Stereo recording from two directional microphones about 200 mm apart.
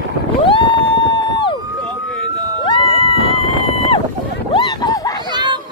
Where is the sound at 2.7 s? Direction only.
25° left (ahead or behind).